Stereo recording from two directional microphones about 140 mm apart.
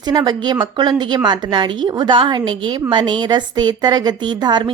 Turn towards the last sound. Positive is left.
turn(degrees=-30)  # may be behind; listen again after turning